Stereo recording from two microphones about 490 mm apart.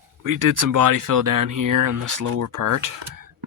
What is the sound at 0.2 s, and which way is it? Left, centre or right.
Speech, right.